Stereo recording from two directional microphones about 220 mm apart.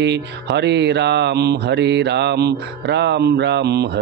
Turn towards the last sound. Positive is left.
turn(degrees=-50)  # may be behind; listen again after turning